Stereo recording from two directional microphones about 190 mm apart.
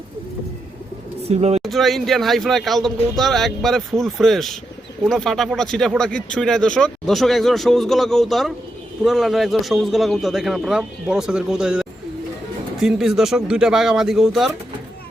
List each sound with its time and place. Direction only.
1.2 s speech: 35° right (ahead or behind)
1.6 s speech: centre (ahead or behind)